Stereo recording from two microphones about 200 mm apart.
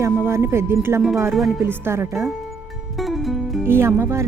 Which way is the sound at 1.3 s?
Centre (ahead or behind).